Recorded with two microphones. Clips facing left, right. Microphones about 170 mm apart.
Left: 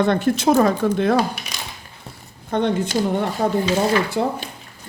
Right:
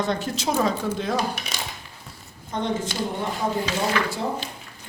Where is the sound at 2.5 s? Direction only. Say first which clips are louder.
Left 7 dB; 60° left (ahead or behind).